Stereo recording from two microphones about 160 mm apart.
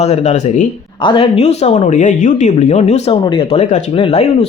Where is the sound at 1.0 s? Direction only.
35° left (ahead or behind).